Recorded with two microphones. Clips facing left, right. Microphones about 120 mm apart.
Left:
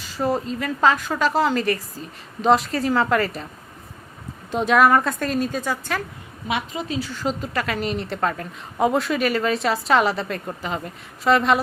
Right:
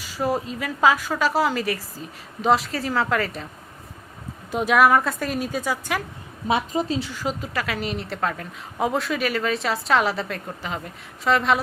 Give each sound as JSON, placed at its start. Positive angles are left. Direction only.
{"t": 0.2, "sound": "a woman's voice", "side_deg": -10}
{"t": 4.5, "sound": "a woman's voice", "side_deg": -5}
{"t": 6.5, "sound": "a woman's voice", "side_deg": -35}
{"t": 7.1, "sound": "a woman's voice", "side_deg": -5}